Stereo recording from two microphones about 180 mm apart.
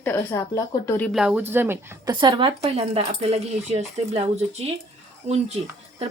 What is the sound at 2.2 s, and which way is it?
Speech, 25° right (ahead or behind).